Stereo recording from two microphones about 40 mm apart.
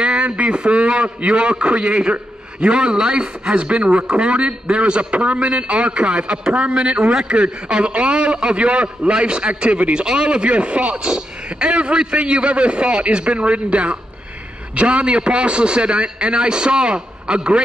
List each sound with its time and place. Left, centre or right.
0.0 s speech: right